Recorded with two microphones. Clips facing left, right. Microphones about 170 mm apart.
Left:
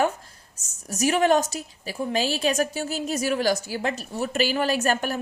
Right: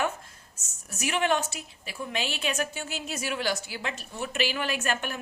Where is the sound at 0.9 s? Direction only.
40° left (ahead or behind).